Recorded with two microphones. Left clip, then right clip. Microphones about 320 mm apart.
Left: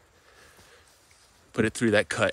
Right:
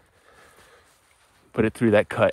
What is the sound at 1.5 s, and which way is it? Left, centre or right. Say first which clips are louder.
Speech: right 4 dB; centre.